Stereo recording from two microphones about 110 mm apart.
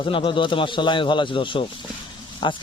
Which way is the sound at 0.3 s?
50° left (ahead or behind).